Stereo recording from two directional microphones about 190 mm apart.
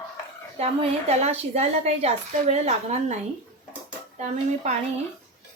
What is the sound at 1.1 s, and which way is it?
A woman's voice, 35° right (ahead or behind).